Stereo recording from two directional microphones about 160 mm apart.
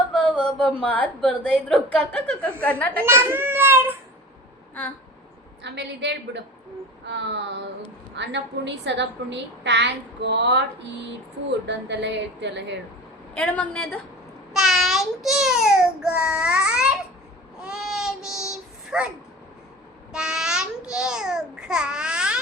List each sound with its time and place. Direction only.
0.7 s a woman's voice: 10° left (ahead or behind)
3.0 s a child's voice: 15° right (ahead or behind)
5.6 s a woman's voice: 90° right
13.3 s a woman's voice: 5° left (ahead or behind)
17.6 s child singing: 5° right (ahead or behind)
20.1 s a child's voice: 5° right (ahead or behind)